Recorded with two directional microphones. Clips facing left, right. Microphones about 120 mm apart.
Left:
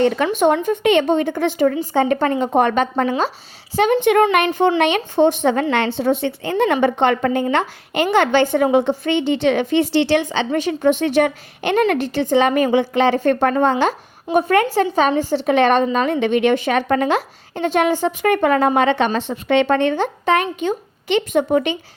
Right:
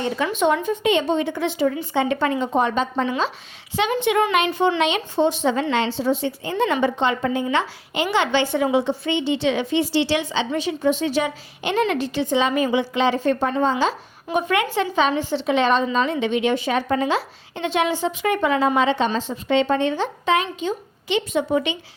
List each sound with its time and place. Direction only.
0.3 s a woman's voice: 50° left (ahead or behind)
1.7 s a woman's voice: 40° left (ahead or behind); by 13.9 s 60° left (ahead or behind)
14.3 s a woman's voice: 45° left (ahead or behind)
15.4 s a woman's voice: 55° left (ahead or behind)